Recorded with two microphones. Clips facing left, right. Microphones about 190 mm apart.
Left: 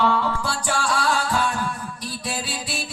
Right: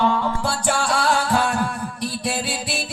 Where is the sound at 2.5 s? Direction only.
55° right (ahead or behind).